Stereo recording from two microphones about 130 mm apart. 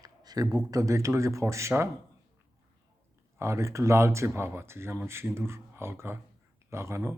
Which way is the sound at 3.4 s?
20° right (ahead or behind).